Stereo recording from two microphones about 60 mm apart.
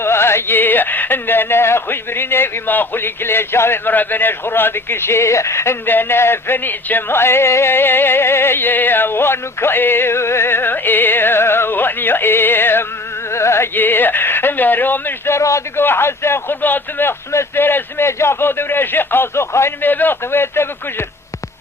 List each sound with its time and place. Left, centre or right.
0.0 s music: left
5.8 s music: left
13.3 s music: left
13.7 s music: left
15.3 s a man's voice: left
15.8 s music: left
19.8 s music: left